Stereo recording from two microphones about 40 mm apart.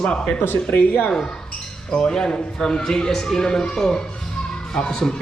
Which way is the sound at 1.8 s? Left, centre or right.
Left.